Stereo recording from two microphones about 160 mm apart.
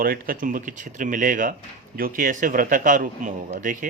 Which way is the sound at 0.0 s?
65° right (ahead or behind).